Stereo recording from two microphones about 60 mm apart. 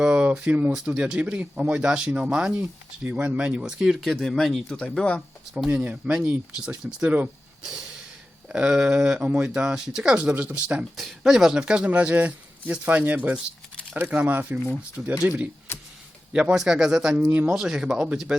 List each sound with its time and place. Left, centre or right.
0.0 s a sound: centre
0.9 s speech: centre
3.9 s speech: centre
5.6 s speech: right
7.6 s speech: centre
10.9 s speech: centre; by 15.4 s right
15.7 s a sound: left
16.3 s speech: right
16.6 s speech: centre